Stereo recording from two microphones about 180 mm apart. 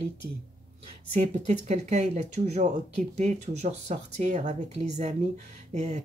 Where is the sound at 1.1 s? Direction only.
40° right (ahead or behind).